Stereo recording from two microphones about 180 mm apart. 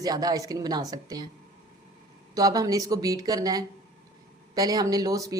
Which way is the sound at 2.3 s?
20° right (ahead or behind).